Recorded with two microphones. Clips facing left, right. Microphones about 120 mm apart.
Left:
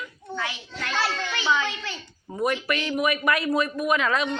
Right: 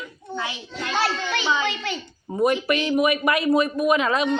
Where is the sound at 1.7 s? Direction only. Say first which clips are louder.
Right 6 dB; 70° right (ahead or behind).